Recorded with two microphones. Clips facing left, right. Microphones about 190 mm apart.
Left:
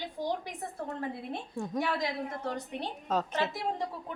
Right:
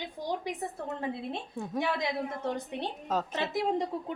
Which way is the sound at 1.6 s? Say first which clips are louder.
Left 5 dB; centre (ahead or behind).